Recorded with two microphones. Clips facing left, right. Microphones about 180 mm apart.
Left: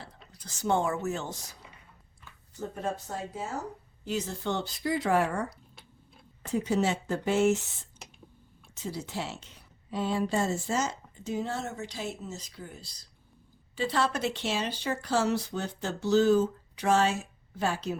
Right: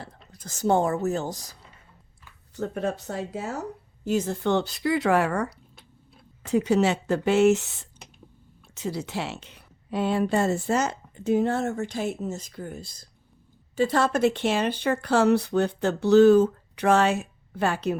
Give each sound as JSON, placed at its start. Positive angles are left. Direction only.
{"t": 0.3, "sound": "speech", "side_deg": -45}
{"t": 2.6, "sound": "speech", "side_deg": -70}
{"t": 4.0, "sound": "a woman's voice", "side_deg": -50}